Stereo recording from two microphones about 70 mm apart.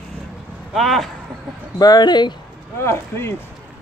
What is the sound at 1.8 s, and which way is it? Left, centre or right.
Speech, left.